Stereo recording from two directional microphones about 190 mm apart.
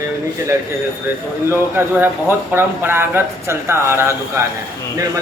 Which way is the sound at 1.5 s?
10° right (ahead or behind).